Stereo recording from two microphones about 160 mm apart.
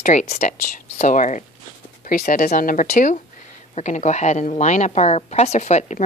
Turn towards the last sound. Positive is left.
turn(degrees=45)  # may be behind; listen again after turning